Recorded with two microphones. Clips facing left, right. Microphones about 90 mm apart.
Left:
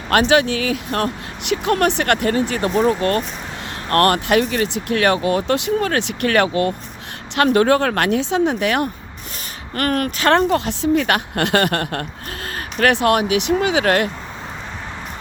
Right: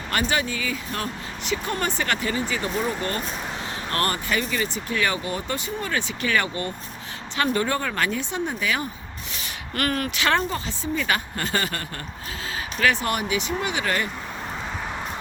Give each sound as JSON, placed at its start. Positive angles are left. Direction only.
{"t": 0.1, "sound": "speech", "side_deg": 75}
{"t": 7.3, "sound": "speech", "side_deg": 70}
{"t": 9.7, "sound": "a woman's voice", "side_deg": 50}